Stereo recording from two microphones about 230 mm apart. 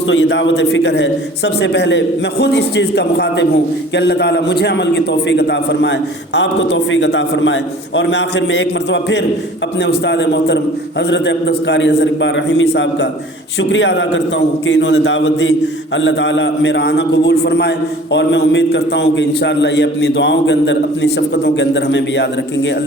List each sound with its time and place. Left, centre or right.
0.1 s a man's voice: left